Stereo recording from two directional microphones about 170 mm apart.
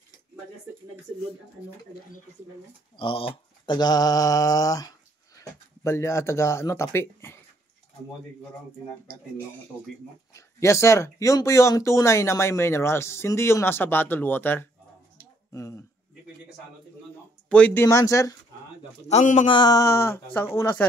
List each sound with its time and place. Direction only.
3.0 s speech: 30° left (ahead or behind); by 7.3 s 15° left (ahead or behind)
10.3 s speech: 15° left (ahead or behind)
17.5 s speech: 5° left (ahead or behind)
17.8 s speech: 20° left (ahead or behind)
19.0 s a man's voice: 40° left (ahead or behind)
19.4 s speech: 25° left (ahead or behind)